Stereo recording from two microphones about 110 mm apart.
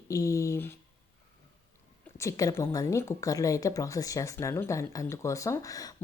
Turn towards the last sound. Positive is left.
turn(degrees=30)  # may be behind; listen again after turning